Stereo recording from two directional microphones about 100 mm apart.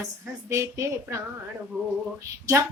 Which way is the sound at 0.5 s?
30° right (ahead or behind).